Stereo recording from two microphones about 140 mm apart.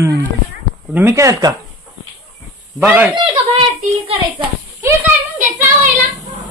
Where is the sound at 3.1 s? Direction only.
40° right (ahead or behind).